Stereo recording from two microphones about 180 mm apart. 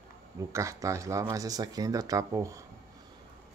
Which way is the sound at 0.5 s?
15° right (ahead or behind).